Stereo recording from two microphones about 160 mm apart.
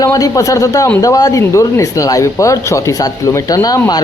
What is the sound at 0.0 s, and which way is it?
Speech, 20° left (ahead or behind).